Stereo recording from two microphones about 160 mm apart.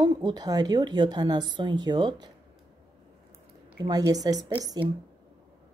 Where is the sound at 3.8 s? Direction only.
25° right (ahead or behind).